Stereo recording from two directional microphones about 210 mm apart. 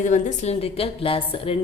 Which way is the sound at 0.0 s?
35° left (ahead or behind).